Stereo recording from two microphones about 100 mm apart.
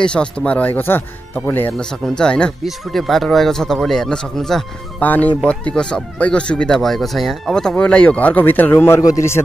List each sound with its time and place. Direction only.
0.0 s speech: 10° left (ahead or behind)
1.7 s speech: 5° left (ahead or behind)
5.0 s a man's voice: 15° left (ahead or behind)